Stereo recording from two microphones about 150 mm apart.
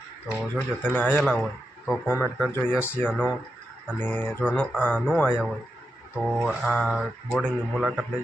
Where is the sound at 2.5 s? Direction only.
15° left (ahead or behind).